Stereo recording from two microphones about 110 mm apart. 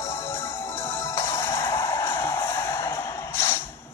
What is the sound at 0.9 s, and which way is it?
Music, 25° left (ahead or behind).